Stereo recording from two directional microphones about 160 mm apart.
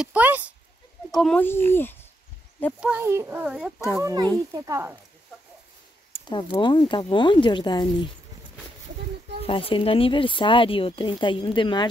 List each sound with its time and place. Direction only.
0.0 s speech: 10° right (ahead or behind)
1.1 s a child's voice: 5° left (ahead or behind)
2.8 s speech: 10° right (ahead or behind)
3.4 s speech: 5° right (ahead or behind)
4.0 s speech: 25° right (ahead or behind)
6.3 s speech: 30° left (ahead or behind)
9.5 s speech: 35° left (ahead or behind)